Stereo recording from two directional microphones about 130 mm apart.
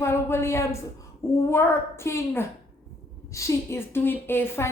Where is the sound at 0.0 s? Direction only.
20° left (ahead or behind).